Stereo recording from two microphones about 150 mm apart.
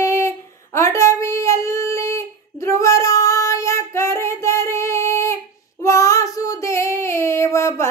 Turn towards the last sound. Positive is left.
turn(degrees=20)  # may be behind; listen again after turning